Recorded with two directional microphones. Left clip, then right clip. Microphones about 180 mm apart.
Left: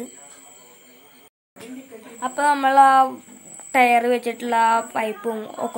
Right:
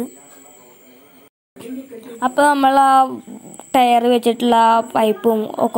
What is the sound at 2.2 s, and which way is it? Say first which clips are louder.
Speech: right 5 dB; 25° right (ahead or behind).